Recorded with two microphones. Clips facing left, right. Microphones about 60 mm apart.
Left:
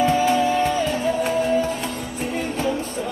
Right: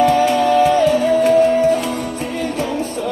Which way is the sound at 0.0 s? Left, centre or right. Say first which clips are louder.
Right 5 dB; right.